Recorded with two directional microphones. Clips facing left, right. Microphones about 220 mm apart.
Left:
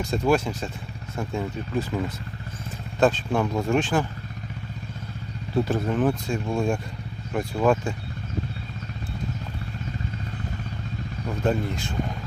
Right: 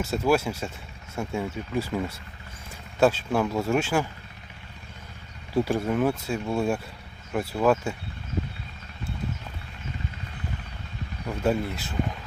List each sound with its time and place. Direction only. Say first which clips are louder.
0.0 s speech: left 1 dB; 5° right (ahead or behind)
5.5 s speech: even; 10° right (ahead or behind)
11.4 s speech: even; 5° right (ahead or behind)